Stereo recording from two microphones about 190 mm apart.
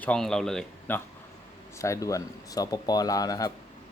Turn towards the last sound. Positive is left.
turn(degrees=20)  # may be behind; listen again after turning